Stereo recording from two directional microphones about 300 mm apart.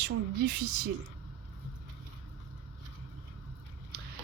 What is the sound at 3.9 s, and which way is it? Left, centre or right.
Biting, right.